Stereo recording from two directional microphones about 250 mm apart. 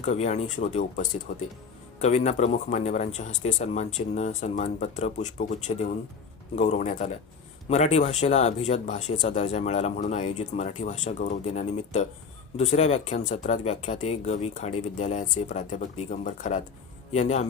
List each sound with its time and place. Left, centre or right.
0.0 s speech: left